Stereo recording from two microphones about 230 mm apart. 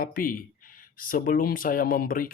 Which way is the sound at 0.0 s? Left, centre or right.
Left.